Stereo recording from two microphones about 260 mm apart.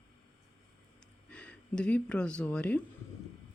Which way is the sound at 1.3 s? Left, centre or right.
Centre.